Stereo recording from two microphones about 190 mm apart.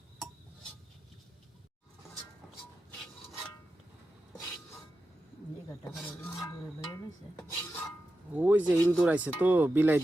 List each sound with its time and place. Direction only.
5.8 s filing: 15° left (ahead or behind)
8.3 s speech: 10° right (ahead or behind)